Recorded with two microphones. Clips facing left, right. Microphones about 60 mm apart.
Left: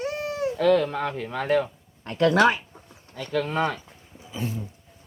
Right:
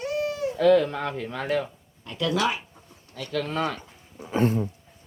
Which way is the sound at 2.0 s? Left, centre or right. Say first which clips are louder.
Left 6 dB; left.